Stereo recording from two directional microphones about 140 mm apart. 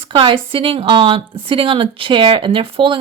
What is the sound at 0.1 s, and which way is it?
A woman's voice, 35° right (ahead or behind).